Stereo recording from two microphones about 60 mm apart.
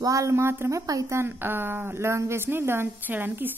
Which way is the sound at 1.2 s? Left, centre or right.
Right.